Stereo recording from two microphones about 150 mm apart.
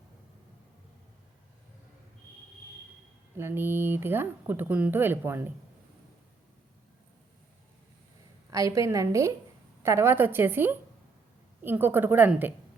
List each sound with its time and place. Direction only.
3.3 s speech: 15° right (ahead or behind)
8.4 s a woman's voice: 20° right (ahead or behind)